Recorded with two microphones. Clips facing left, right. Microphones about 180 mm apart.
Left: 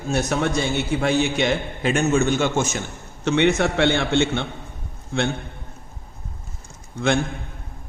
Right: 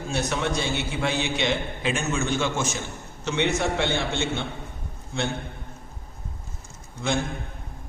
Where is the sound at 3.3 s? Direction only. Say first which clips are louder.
Left 6 dB; 65° left (ahead or behind).